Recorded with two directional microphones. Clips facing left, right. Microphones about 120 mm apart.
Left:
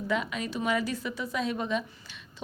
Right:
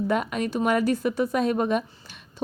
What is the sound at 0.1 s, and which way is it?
A woman's voice, 50° right (ahead or behind).